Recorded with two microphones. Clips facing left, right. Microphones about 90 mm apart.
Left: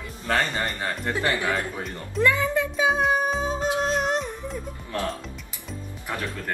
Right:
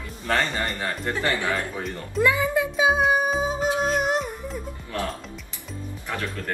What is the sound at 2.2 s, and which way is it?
Music, 10° right (ahead or behind).